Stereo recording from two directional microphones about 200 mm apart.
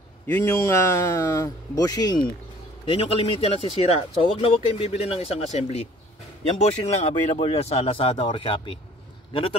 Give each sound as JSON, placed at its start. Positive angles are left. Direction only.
{"t": 0.3, "sound": "speech", "side_deg": 10}